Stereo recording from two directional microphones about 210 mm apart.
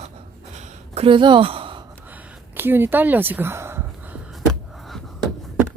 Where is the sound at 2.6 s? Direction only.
10° right (ahead or behind).